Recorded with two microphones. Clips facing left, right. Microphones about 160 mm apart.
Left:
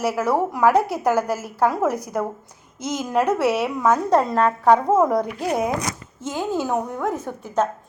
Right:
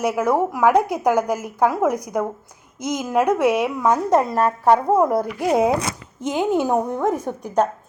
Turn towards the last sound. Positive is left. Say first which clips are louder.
# right 3 dB
turn(degrees=-15)  # may be behind; listen again after turning